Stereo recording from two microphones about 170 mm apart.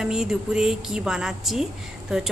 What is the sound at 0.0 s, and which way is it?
A woman's voice, 5° right (ahead or behind).